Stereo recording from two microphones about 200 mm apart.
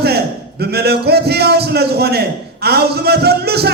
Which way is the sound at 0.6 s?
55° right (ahead or behind).